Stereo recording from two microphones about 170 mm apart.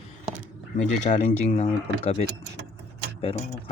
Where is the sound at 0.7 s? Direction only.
45° left (ahead or behind).